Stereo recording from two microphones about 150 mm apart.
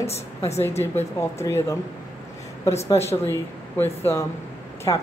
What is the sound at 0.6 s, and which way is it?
A woman's voice, 15° left (ahead or behind).